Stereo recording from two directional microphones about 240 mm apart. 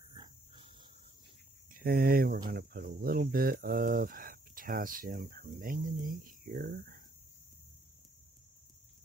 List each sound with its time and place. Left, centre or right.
0.1 s dog: centre
1.7 s speech: right